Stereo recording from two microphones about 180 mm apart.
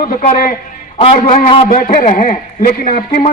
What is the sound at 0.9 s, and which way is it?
A man's voice, 30° left (ahead or behind).